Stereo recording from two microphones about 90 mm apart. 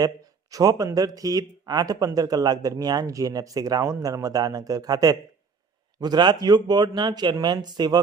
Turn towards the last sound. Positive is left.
turn(degrees=-50)  # may be behind; listen again after turning